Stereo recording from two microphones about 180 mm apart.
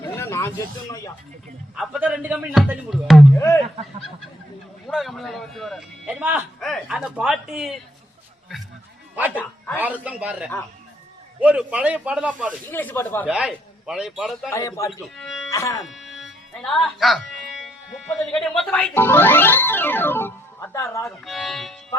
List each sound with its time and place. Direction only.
0.0 s a sound: 15° left (ahead or behind)
1.7 s speech: 5° right (ahead or behind)
3.3 s speech: 15° left (ahead or behind)
4.9 s speech: centre (ahead or behind)
6.6 s speech: 5° left (ahead or behind)
9.7 s a man's voice: 10° right (ahead or behind)
12.7 s speech: 10° left (ahead or behind)
13.2 s speech: 5° right (ahead or behind)
14.5 s speech: 15° left (ahead or behind)
14.8 s speech: centre (ahead or behind)
15.4 s speech: 15° left (ahead or behind)
15.8 s speech: centre (ahead or behind); by 21.1 s 15° left (ahead or behind)
21.2 s speech: centre (ahead or behind)